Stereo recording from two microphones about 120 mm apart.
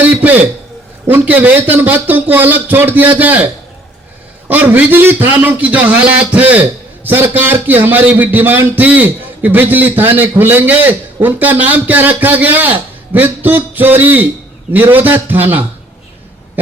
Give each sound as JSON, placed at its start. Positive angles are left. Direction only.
{"t": 0.0, "sound": "a man's voice", "side_deg": -15}